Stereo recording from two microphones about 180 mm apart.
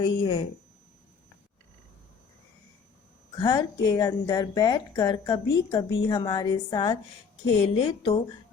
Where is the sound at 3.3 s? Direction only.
25° left (ahead or behind).